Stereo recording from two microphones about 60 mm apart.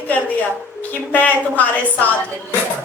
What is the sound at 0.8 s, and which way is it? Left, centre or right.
A man's voice, left.